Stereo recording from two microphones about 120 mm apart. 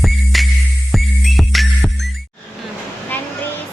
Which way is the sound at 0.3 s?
Centre (ahead or behind).